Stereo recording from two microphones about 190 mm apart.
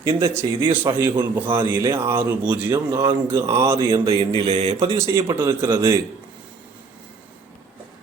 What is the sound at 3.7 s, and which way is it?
Speech, 25° right (ahead or behind).